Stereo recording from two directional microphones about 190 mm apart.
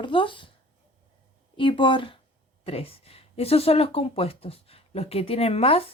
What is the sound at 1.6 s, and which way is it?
Speech, 25° left (ahead or behind).